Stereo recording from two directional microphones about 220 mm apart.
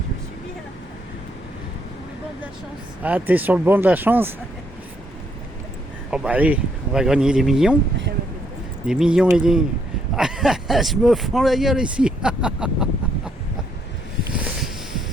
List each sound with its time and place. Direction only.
3.0 s speech: 5° right (ahead or behind)
6.1 s speech: 5° right (ahead or behind)
8.9 s speech: 5° right (ahead or behind)